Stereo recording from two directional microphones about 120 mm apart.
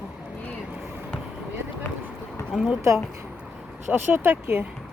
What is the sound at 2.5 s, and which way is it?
Speech, 5° right (ahead or behind).